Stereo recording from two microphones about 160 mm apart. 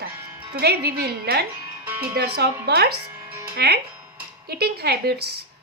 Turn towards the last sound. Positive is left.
turn(degrees=-90)